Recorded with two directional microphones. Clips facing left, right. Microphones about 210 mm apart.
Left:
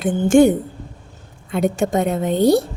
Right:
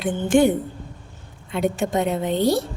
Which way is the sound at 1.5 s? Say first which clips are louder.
Left 3 dB; 45° left (ahead or behind).